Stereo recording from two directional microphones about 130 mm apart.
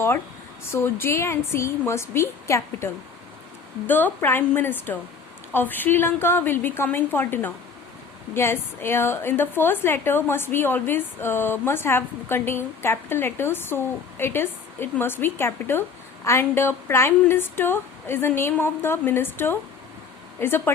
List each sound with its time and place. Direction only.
0.7 s a woman's voice: 15° left (ahead or behind)